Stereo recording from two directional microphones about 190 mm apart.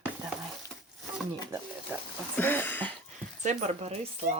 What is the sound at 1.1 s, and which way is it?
Speech, 10° right (ahead or behind).